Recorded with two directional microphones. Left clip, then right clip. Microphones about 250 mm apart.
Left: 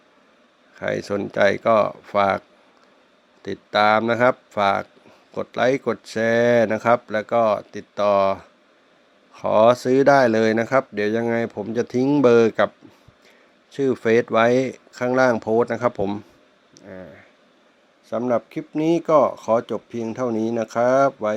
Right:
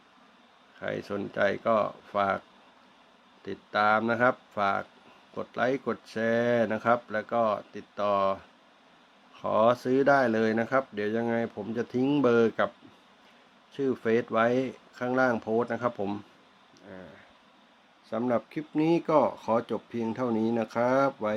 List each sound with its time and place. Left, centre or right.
0.8 s speech: left
3.4 s speech: left
13.7 s speech: left
16.7 s a sound: left
18.1 s speech: centre